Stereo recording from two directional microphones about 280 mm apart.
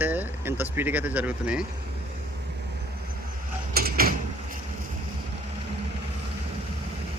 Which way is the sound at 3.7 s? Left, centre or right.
Right.